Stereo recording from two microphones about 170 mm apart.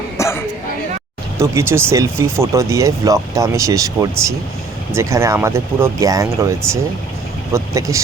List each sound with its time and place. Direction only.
0.2 s speech: 15° left (ahead or behind)
1.4 s speech: 15° right (ahead or behind)
7.5 s speech: 15° right (ahead or behind)